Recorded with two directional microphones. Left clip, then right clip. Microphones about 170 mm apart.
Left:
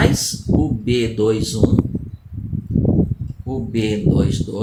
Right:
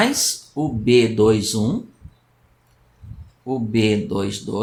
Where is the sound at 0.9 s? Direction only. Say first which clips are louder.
Right 5 dB; 25° right (ahead or behind).